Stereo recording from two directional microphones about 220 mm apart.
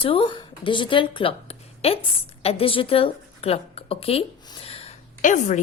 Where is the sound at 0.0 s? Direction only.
25° left (ahead or behind).